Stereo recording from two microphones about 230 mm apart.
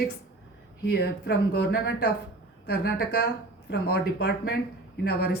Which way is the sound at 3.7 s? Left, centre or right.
Left.